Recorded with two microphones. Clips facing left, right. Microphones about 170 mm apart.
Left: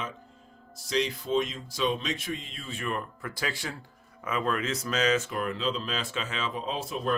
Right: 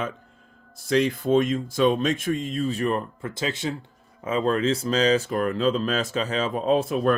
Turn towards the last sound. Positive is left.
turn(degrees=-60)  # may be behind; listen again after turning